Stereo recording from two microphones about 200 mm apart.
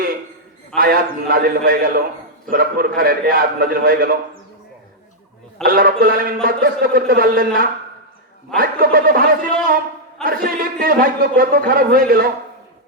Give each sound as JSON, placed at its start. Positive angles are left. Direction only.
{"t": 0.8, "sound": "a man's voice", "side_deg": -45}
{"t": 5.6, "sound": "a man's voice", "side_deg": -50}
{"t": 10.2, "sound": "a man's voice", "side_deg": -45}